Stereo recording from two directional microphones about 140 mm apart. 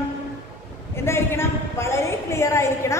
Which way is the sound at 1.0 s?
20° left (ahead or behind).